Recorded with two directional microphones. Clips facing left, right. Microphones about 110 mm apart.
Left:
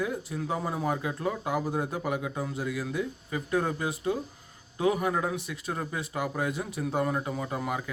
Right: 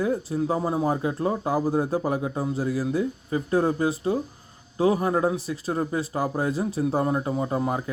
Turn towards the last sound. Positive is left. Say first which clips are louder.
# right 6 dB
turn(degrees=-35)  # may be behind; listen again after turning